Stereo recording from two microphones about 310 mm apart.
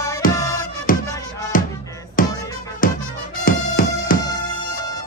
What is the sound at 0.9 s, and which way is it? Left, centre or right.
Music, left.